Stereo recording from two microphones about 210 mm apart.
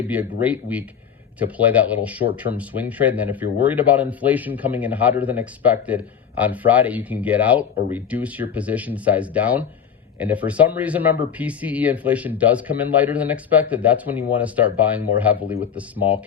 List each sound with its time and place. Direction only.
0.4 s speech: 5° right (ahead or behind)